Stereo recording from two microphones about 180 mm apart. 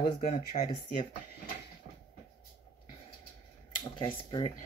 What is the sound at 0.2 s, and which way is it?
Speech, 50° left (ahead or behind).